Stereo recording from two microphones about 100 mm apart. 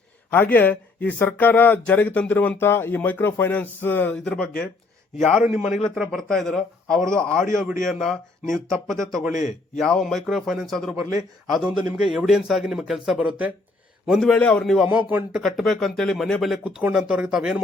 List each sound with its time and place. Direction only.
0.3 s speech: 20° left (ahead or behind)
5.2 s a man's voice: centre (ahead or behind)
14.1 s a man's voice: 5° left (ahead or behind)
16.6 s speech: 10° right (ahead or behind)